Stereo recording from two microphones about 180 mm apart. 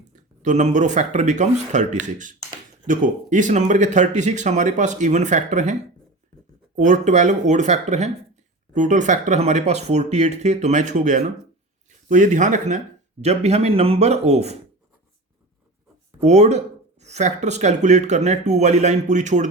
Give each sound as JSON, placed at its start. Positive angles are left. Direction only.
{"t": 0.4, "sound": "speech", "side_deg": -40}
{"t": 6.7, "sound": "speech", "side_deg": -45}
{"t": 16.2, "sound": "speech", "side_deg": -40}